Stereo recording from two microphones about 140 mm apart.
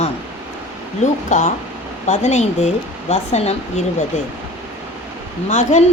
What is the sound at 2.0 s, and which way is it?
Speech, 55° left (ahead or behind).